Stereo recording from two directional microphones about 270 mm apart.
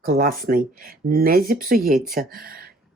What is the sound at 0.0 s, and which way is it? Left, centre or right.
Speech, right.